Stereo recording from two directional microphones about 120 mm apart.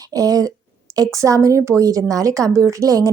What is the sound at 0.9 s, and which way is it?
Speech, 30° right (ahead or behind).